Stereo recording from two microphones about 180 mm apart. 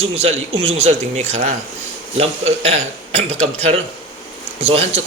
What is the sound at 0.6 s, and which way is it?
Speech, 35° right (ahead or behind).